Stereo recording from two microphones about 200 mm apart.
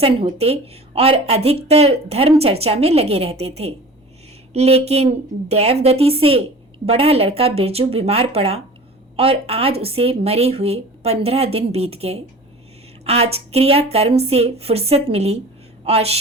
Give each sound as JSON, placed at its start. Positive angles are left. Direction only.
{"t": 0.0, "sound": "a woman's voice", "side_deg": -30}